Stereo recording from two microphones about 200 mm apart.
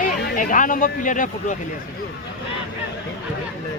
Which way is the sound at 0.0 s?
40° left (ahead or behind).